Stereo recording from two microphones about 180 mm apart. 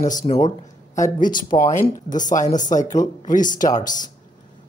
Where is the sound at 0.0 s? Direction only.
45° left (ahead or behind).